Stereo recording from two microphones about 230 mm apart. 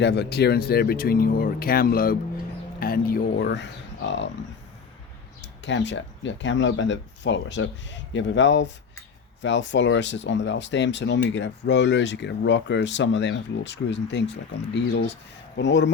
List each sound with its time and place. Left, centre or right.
0.0 s speech: left
5.6 s speech: left